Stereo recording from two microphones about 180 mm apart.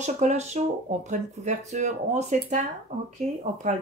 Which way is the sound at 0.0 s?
40° right (ahead or behind).